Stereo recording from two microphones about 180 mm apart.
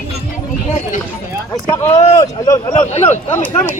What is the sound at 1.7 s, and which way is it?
Speech, 15° left (ahead or behind).